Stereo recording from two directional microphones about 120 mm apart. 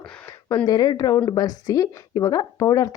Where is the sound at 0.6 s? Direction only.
35° left (ahead or behind).